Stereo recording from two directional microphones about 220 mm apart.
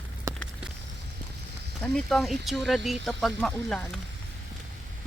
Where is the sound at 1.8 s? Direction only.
5° left (ahead or behind).